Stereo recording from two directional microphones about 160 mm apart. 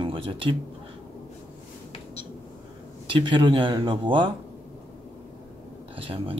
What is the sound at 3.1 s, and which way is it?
Speech, 30° right (ahead or behind).